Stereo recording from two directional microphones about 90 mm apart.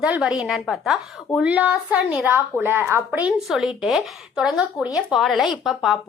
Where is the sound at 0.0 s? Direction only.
10° right (ahead or behind).